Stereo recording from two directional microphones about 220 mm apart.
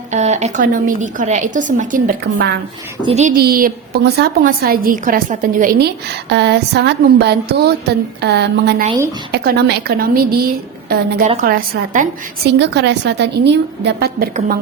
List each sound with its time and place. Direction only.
0.1 s a woman's voice: 30° right (ahead or behind)
3.1 s a woman's voice: 30° right (ahead or behind)
3.3 s a woman's voice: 45° right (ahead or behind)
12.5 s a woman's voice: 50° right (ahead or behind)
14.3 s a woman's voice: 35° right (ahead or behind)